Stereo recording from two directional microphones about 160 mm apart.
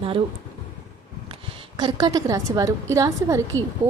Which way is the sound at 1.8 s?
25° right (ahead or behind).